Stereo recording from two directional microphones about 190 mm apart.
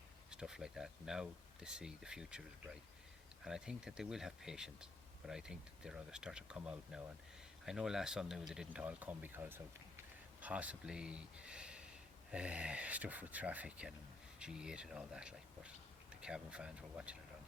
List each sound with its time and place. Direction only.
0.3 s speech: 5° right (ahead or behind)